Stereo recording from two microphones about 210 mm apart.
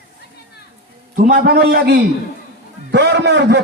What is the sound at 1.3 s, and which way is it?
A man's voice, 45° right (ahead or behind).